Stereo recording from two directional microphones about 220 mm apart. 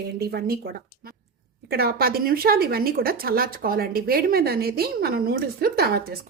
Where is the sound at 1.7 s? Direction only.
45° right (ahead or behind).